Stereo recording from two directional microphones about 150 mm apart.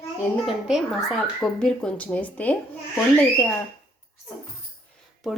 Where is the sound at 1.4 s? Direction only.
5° left (ahead or behind).